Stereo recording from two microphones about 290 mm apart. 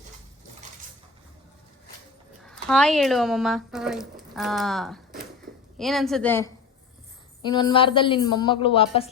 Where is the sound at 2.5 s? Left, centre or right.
Centre.